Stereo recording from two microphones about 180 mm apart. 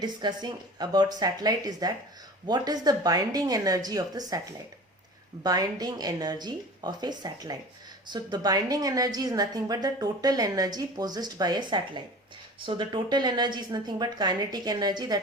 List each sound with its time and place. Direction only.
0.0 s a woman's voice: 25° right (ahead or behind)
5.4 s a woman's voice: 20° right (ahead or behind)